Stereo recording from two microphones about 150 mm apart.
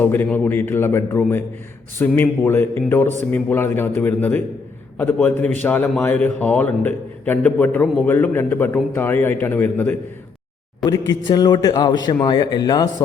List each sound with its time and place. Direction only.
0.0 s a man's voice: 15° left (ahead or behind)
10.8 s a man's voice: 25° left (ahead or behind)